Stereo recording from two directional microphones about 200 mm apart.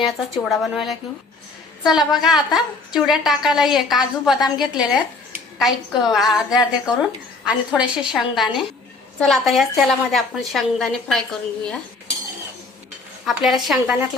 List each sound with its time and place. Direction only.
0.6 s a woman's voice: centre (ahead or behind)
4.4 s a woman's voice: 20° left (ahead or behind)
5.5 s a woman's voice: centre (ahead or behind)
13.2 s a woman's voice: centre (ahead or behind)